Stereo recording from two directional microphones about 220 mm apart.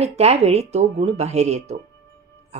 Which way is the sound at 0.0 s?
30° right (ahead or behind).